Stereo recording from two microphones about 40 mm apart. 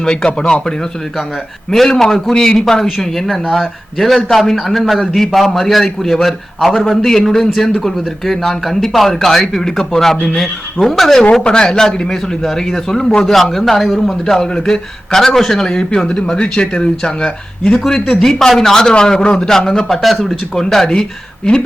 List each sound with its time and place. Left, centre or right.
0.0 s speech: centre
2.0 s a man's voice: centre
2.3 s speech: centre
3.9 s a man's voice: centre
7.5 s speech: centre
11.4 s speech: left
19.4 s speech: centre
20.0 s a man's voice: centre